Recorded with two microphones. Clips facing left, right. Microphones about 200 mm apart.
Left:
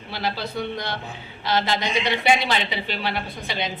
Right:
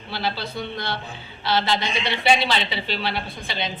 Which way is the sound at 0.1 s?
15° left (ahead or behind).